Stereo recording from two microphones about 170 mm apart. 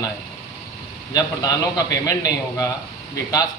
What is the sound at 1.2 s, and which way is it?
A man's voice, 20° left (ahead or behind).